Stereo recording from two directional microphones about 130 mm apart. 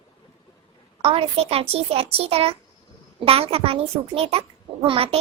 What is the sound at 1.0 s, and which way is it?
A child's voice, 50° right (ahead or behind).